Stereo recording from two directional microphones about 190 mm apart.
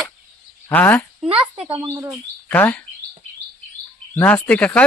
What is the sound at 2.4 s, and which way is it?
Speech, 10° left (ahead or behind).